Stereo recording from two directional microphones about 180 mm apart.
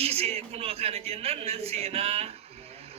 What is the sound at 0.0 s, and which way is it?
A man's voice, 35° right (ahead or behind).